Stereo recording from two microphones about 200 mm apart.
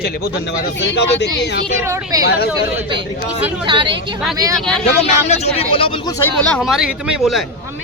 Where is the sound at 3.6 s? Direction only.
25° right (ahead or behind).